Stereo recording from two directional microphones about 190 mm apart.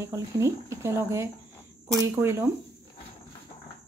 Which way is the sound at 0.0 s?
15° right (ahead or behind).